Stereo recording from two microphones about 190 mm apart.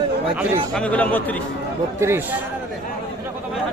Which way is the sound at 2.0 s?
10° right (ahead or behind).